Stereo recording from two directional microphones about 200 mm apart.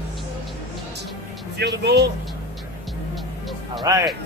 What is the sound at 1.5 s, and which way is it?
Music, 55° right (ahead or behind).